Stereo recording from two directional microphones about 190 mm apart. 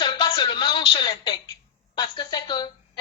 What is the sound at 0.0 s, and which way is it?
A woman's voice, 25° left (ahead or behind).